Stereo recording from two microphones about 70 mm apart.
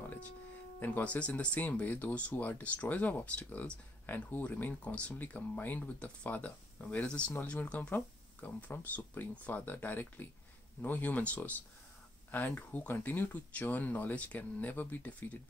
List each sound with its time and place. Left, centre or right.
0.7 s speech: left